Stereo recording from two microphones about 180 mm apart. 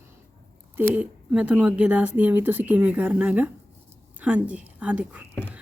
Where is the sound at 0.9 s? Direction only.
5° right (ahead or behind).